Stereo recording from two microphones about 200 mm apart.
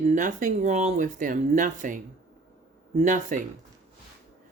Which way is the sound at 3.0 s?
40° right (ahead or behind).